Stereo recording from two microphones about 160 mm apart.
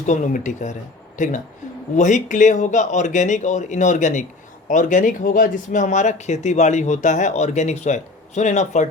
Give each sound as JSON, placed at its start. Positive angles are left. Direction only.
{"t": 0.0, "sound": "speech", "side_deg": 50}